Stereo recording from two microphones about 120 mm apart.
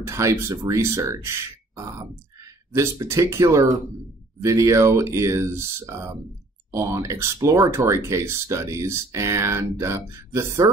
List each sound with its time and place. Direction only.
0.0 s speech: 25° right (ahead or behind)